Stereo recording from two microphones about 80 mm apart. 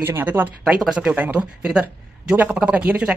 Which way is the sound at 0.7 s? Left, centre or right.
Centre.